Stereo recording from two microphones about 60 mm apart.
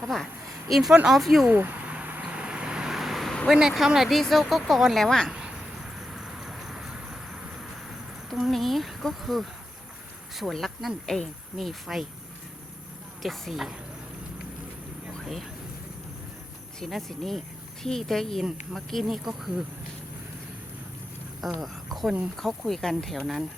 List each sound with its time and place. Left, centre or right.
0.7 s speech: centre
1.5 s speech: right
1.8 s vehicle: right
2.9 s vehicle: centre
3.5 s speech: centre
5.0 s speech: centre
6.1 s vehicle: centre
8.3 s speech: centre
13.2 s speech: centre
16.8 s speech: centre
21.4 s speech: centre